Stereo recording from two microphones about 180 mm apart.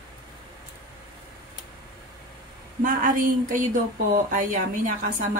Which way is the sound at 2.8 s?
50° right (ahead or behind).